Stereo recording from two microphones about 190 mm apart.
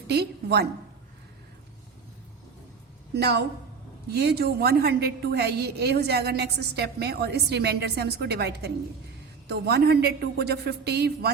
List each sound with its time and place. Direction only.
0.1 s a woman's voice: 60° right (ahead or behind)
3.2 s a woman's voice: 60° right (ahead or behind)